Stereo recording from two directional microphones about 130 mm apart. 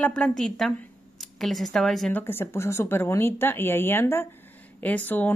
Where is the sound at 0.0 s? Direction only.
5° left (ahead or behind).